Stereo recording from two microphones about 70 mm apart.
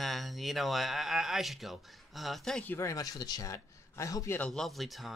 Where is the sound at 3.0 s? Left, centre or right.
Left.